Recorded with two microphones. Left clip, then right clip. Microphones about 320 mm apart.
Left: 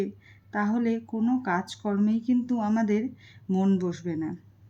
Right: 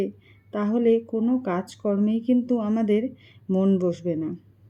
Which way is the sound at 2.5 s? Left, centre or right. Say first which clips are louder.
Right 3 dB; centre.